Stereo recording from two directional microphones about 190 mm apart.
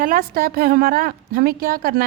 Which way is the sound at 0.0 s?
50° right (ahead or behind).